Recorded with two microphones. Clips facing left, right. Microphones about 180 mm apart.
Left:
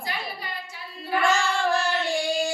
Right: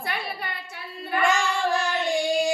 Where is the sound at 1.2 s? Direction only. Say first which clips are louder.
Even; 15° right (ahead or behind).